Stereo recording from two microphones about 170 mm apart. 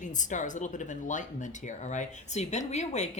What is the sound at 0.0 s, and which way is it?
Speech, 45° left (ahead or behind).